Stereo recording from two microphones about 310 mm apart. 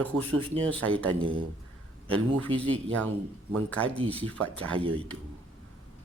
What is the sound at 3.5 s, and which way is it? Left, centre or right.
Speech, centre.